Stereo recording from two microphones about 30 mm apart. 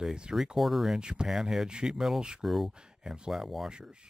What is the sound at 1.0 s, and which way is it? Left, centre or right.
Speech, right.